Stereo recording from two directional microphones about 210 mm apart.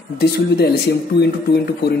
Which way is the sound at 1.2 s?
50° left (ahead or behind).